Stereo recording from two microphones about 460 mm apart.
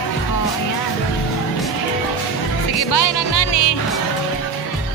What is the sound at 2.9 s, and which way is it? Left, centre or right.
Music, left.